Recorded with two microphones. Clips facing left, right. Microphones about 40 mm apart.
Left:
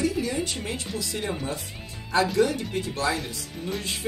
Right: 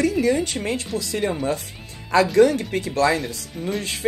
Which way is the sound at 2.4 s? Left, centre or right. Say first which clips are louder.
Right 7 dB; right.